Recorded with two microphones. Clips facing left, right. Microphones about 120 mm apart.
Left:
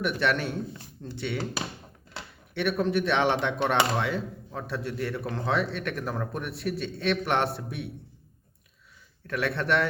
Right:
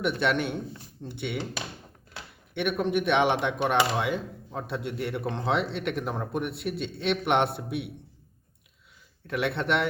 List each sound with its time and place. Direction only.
0.0 s speech: 20° right (ahead or behind)
2.6 s speech: 15° right (ahead or behind)
9.2 s speech: 20° right (ahead or behind)